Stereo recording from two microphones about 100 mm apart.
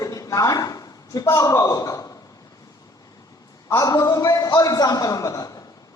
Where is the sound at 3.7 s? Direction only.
35° left (ahead or behind).